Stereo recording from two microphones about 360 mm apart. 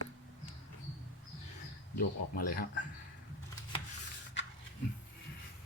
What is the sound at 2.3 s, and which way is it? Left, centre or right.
Speech, left.